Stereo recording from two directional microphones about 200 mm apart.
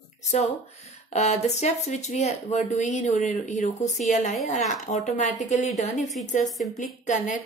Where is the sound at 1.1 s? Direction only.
35° left (ahead or behind).